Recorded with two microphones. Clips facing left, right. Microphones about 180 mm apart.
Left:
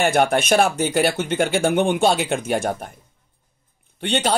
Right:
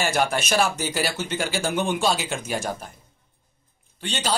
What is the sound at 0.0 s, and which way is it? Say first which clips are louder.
Speech: left 6 dB; 55° left (ahead or behind).